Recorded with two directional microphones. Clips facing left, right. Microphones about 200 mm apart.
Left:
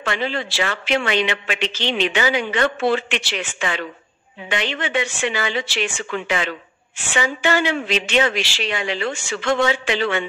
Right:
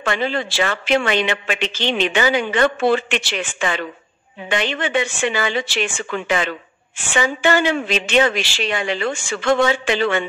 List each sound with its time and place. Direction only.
0.0 s speech: 50° right (ahead or behind)